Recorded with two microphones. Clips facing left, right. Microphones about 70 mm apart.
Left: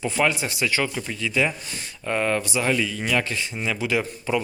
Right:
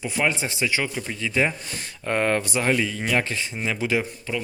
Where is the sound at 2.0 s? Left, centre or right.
Right.